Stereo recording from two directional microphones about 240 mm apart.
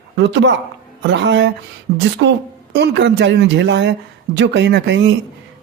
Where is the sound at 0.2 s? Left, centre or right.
Right.